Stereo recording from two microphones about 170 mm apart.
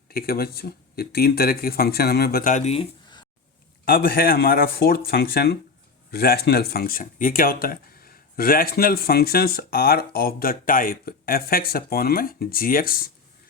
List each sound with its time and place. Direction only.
0.1 s speech: 60° left (ahead or behind); by 2.8 s 40° left (ahead or behind)
3.8 s speech: 60° left (ahead or behind)